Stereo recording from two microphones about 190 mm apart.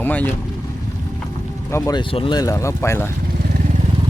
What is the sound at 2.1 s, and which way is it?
Speech, 25° left (ahead or behind).